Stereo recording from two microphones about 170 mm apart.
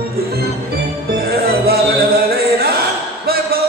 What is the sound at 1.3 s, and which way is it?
Music, 65° right (ahead or behind).